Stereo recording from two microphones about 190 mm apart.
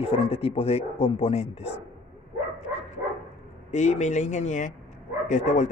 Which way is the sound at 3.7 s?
35° left (ahead or behind).